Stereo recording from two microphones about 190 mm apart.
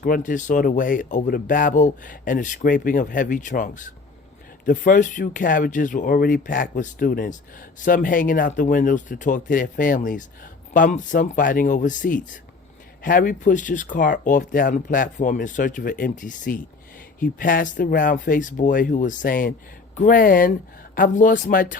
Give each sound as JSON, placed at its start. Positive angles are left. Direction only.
{"t": 0.0, "sound": "speech", "side_deg": 45}